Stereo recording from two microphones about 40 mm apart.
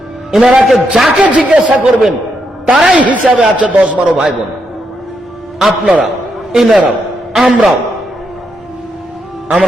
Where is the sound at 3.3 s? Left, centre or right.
Centre.